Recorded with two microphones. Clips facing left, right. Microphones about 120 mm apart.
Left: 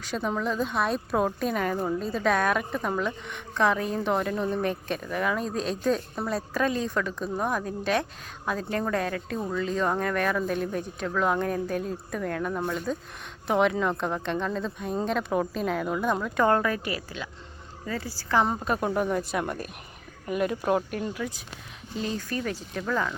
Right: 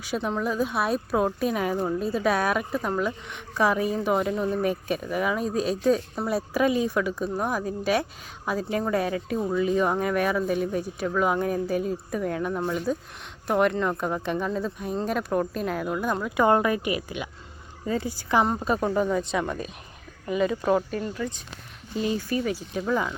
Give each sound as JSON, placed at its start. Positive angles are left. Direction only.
{"t": 0.0, "sound": "speech", "side_deg": -5}
{"t": 18.4, "sound": "speech", "side_deg": 0}
{"t": 21.9, "sound": "speech", "side_deg": -5}